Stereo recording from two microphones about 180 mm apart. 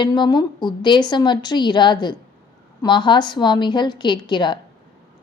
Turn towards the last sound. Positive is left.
turn(degrees=25)  # may be behind; listen again after turning